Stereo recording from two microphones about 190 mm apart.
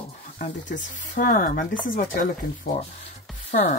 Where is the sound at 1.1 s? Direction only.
45° left (ahead or behind).